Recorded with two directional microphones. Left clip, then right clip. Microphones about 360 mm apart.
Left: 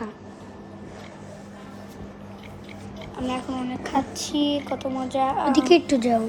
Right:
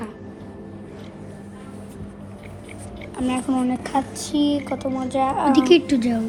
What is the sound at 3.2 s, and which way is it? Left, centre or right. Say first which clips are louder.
Speech: right 4 dB; centre.